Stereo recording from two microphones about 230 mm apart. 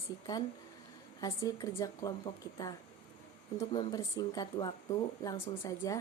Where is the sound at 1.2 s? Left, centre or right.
Centre.